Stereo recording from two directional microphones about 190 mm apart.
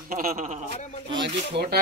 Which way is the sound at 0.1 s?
45° right (ahead or behind).